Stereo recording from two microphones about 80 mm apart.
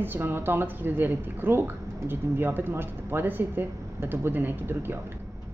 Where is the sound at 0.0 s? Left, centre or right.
Right.